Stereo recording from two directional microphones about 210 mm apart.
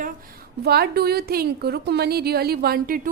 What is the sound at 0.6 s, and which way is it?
A woman's voice, 50° right (ahead or behind).